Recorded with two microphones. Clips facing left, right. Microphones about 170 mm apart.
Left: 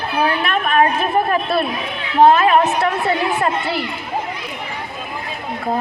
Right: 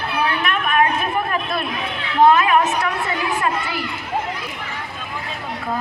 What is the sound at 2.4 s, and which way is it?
Speech, 30° left (ahead or behind).